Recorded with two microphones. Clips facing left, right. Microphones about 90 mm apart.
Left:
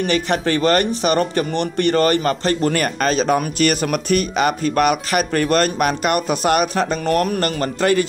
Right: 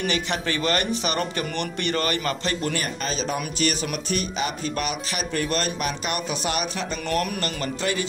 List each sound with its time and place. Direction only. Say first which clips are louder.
0.0 s speech: left 7 dB; 40° left (ahead or behind)
2.8 s speech: left 10 dB; 60° left (ahead or behind)